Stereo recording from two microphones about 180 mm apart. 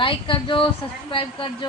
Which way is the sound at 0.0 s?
30° left (ahead or behind).